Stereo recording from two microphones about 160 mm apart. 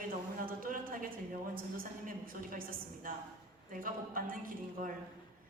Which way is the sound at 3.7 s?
60° right (ahead or behind).